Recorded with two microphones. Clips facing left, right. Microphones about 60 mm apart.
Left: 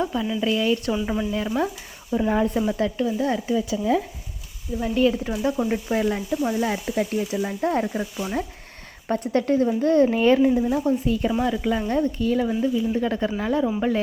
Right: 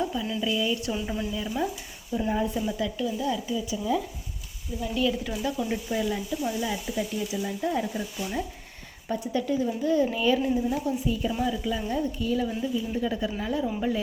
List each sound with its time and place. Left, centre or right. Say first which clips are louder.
0.0 s a sound: left 4 dB; left
0.4 s speech: left 6 dB; left
3.7 s speech: left 4 dB; left
4.8 s speech: left 6 dB; left
5.9 s speech: left 5 dB; left
8.2 s speech: left 4 dB; left
9.3 s speech: left 7 dB; left